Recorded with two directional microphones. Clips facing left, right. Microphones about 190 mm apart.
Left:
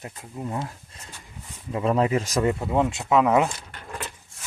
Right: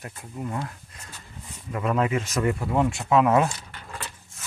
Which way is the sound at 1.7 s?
30° left (ahead or behind).